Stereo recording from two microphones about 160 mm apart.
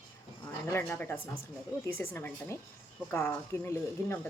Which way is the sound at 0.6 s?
15° left (ahead or behind).